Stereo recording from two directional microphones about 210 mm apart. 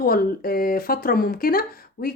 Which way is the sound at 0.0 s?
45° left (ahead or behind).